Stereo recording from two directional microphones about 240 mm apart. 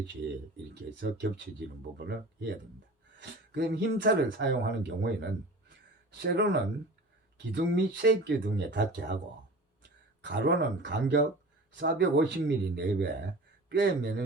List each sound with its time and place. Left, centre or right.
0.7 s speech: right